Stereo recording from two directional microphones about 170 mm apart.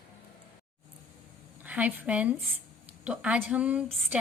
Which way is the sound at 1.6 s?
10° right (ahead or behind).